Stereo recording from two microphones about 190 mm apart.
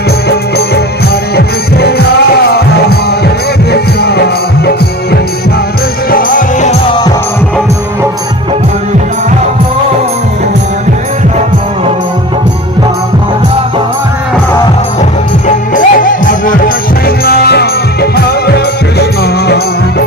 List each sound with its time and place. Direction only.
1.3 s music: 55° left (ahead or behind)
6.0 s music: 50° left (ahead or behind)
15.4 s music: 45° left (ahead or behind)